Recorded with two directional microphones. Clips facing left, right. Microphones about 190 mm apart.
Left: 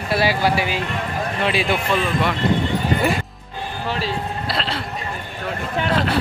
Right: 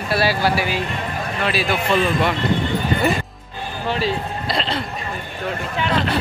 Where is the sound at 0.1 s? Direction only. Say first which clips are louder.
Even; 15° left (ahead or behind).